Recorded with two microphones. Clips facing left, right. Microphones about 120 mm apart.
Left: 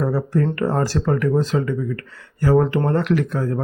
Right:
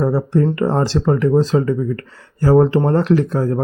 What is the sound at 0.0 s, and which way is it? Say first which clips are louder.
Speech: right 4 dB; 25° right (ahead or behind).